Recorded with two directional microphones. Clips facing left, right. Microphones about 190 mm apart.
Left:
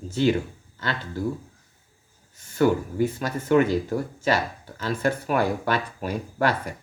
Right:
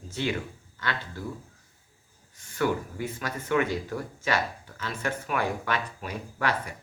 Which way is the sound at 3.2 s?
30° left (ahead or behind).